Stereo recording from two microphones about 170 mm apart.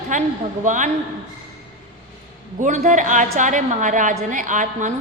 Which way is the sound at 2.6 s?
45° right (ahead or behind).